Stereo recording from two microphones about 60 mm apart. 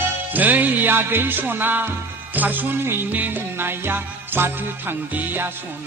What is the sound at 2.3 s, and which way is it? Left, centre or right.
Speech, right.